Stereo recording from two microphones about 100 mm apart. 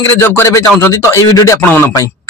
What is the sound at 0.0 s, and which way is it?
A man's voice, 25° left (ahead or behind).